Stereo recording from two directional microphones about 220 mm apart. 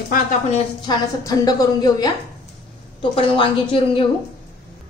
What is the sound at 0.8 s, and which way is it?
A woman's voice, 15° left (ahead or behind).